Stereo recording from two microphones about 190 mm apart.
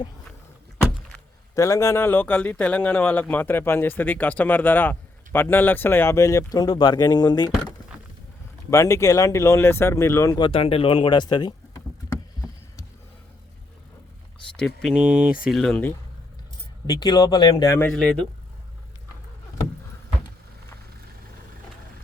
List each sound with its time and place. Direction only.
1.5 s speech: 15° left (ahead or behind)
8.7 s speech: 15° left (ahead or behind)
14.5 s speech: 5° left (ahead or behind)
16.8 s speech: 20° left (ahead or behind)
17.9 s speech: 5° left (ahead or behind)